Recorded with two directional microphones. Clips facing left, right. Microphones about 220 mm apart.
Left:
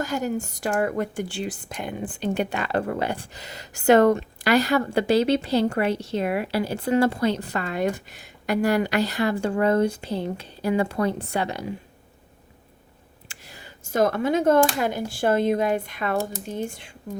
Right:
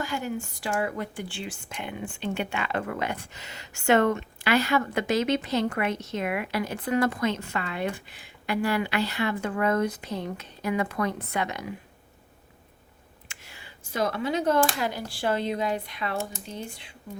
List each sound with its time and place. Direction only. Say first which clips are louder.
0.0 s speech: left 5 dB; 40° left (ahead or behind)
13.2 s a sound: left 5 dB; 35° left (ahead or behind)
14.8 s speech: left 5 dB; 50° left (ahead or behind)